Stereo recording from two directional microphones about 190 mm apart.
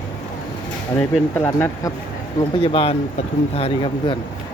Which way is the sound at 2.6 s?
30° left (ahead or behind).